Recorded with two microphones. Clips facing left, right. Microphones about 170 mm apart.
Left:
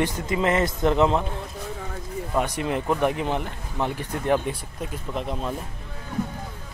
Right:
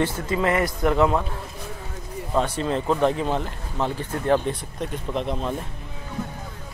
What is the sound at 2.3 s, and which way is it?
Speech, 15° left (ahead or behind).